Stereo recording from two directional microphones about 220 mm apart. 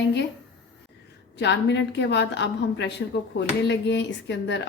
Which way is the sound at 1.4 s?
55° left (ahead or behind).